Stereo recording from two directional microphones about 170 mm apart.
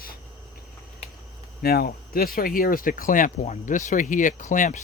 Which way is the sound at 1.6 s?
60° left (ahead or behind).